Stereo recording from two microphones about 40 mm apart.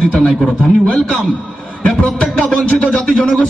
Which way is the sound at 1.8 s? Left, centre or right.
Left.